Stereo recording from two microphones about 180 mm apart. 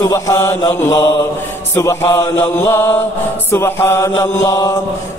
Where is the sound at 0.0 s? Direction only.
15° left (ahead or behind).